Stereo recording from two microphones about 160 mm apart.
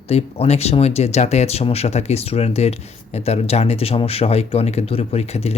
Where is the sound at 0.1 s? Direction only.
40° left (ahead or behind).